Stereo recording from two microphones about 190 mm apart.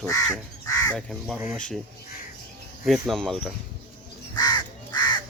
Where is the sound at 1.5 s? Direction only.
5° left (ahead or behind).